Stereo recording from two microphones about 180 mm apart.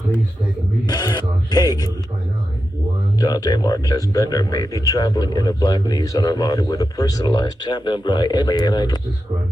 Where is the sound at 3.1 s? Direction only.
20° left (ahead or behind).